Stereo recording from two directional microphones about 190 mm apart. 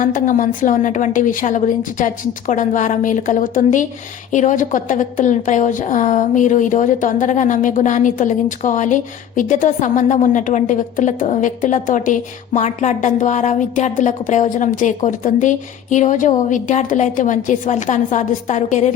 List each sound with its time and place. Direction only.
0.0 s a woman's voice: 45° left (ahead or behind)